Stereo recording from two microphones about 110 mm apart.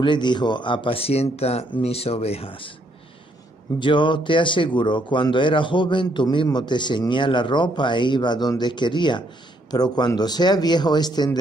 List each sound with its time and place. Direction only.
0.0 s speech: 45° left (ahead or behind)
3.8 s a man's voice: 45° left (ahead or behind)